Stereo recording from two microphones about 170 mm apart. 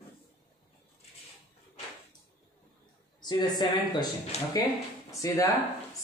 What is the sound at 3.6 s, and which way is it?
Speech, 25° left (ahead or behind).